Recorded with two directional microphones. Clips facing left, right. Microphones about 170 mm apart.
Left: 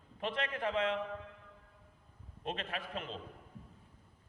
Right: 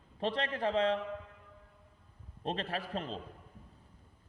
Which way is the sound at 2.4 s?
35° right (ahead or behind).